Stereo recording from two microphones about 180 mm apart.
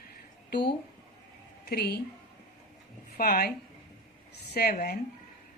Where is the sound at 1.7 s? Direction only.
60° left (ahead or behind).